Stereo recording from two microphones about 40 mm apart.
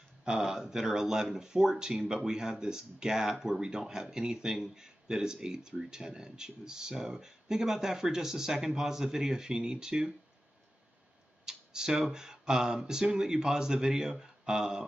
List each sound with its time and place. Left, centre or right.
0.4 s speech: centre
11.4 s a sound: centre
12.1 s speech: centre